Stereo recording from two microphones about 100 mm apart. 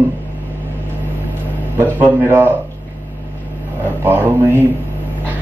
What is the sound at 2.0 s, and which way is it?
Speech, 20° right (ahead or behind).